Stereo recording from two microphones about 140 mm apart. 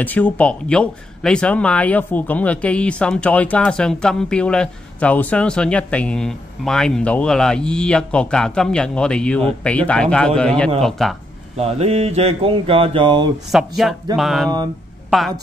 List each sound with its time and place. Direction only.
0.0 s speech: 10° left (ahead or behind)
11.5 s speech: 45° right (ahead or behind)
13.5 s a woman's voice: centre (ahead or behind)